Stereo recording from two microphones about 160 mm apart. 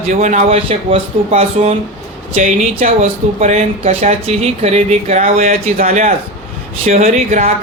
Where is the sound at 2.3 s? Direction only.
55° right (ahead or behind).